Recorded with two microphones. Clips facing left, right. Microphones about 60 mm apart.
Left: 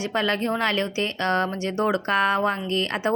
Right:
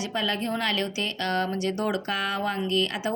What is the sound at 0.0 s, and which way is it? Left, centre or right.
A woman's voice, left.